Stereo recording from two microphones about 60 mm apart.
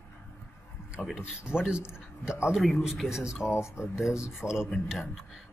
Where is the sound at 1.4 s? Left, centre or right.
Centre.